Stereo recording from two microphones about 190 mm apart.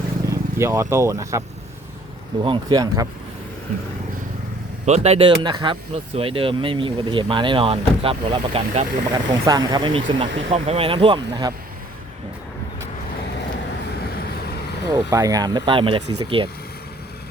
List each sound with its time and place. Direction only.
0.3 s speech: 15° right (ahead or behind)
4.9 s speech: 35° right (ahead or behind)
14.8 s speech: 20° right (ahead or behind)